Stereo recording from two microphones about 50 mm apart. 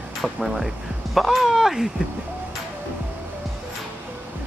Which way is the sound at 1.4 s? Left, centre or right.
Centre.